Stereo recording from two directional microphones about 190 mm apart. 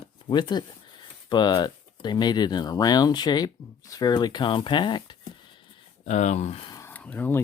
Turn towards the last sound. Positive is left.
turn(degrees=10)  # may be behind; listen again after turning